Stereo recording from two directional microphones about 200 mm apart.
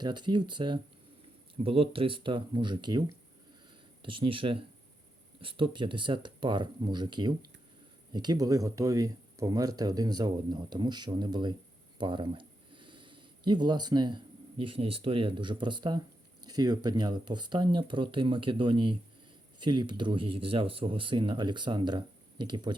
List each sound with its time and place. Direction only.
0.0 s speech: 20° right (ahead or behind)
4.0 s speech: 25° right (ahead or behind)
11.9 s a sound: 25° right (ahead or behind)
14.6 s speech: 25° right (ahead or behind)